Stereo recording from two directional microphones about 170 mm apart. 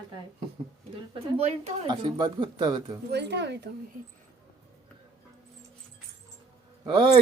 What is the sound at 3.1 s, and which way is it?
Speech, 85° right.